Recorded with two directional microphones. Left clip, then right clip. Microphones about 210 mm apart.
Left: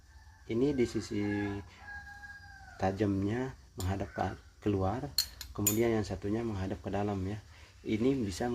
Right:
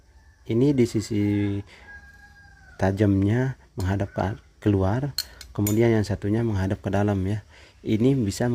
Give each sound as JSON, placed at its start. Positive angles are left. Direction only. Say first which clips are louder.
{"t": 0.4, "sound": "speech", "louder": "right 9 dB", "side_deg": -55}